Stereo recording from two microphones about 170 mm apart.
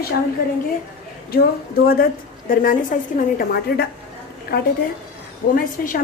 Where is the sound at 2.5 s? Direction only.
55° left (ahead or behind).